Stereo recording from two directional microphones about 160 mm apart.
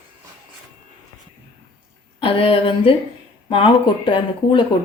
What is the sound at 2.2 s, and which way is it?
Speech, 35° left (ahead or behind).